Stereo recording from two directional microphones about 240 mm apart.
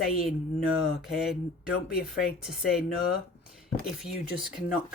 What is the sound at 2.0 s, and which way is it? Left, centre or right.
Speech, left.